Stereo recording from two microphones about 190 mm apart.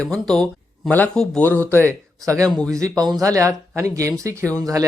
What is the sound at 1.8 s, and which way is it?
Speech, 15° right (ahead or behind).